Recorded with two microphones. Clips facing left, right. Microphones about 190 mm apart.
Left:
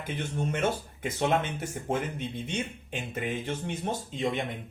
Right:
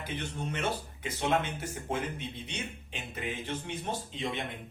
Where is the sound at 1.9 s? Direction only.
50° left (ahead or behind).